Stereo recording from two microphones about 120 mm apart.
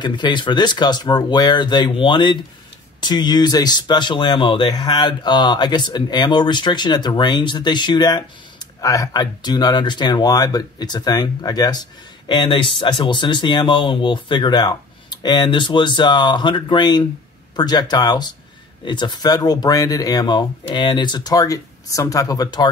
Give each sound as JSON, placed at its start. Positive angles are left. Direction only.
{"t": 0.0, "sound": "speech", "side_deg": 40}